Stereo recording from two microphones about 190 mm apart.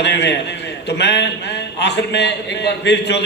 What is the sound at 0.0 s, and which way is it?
A man's voice, 65° left (ahead or behind).